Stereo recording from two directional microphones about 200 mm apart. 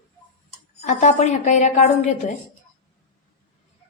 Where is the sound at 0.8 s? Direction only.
35° left (ahead or behind).